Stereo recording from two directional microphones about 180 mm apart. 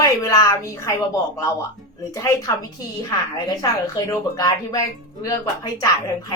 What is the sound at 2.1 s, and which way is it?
Speech, 20° left (ahead or behind).